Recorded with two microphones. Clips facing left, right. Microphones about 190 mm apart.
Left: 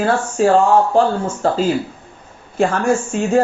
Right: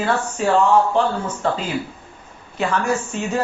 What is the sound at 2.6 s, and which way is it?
Speech, 45° left (ahead or behind).